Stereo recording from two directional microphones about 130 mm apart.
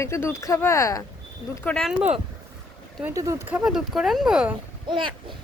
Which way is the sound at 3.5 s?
5° right (ahead or behind).